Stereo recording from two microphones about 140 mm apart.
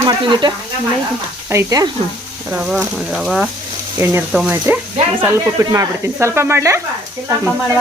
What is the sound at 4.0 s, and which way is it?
Speech, 20° right (ahead or behind).